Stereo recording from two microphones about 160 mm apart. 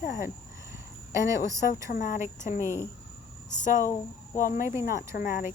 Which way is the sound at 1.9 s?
55° left (ahead or behind).